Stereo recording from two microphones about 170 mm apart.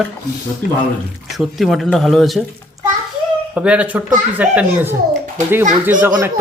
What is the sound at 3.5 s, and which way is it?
A child's voice, 5° right (ahead or behind).